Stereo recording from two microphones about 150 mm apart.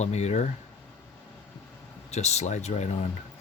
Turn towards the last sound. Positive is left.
turn(degrees=50)  # may be behind; listen again after turning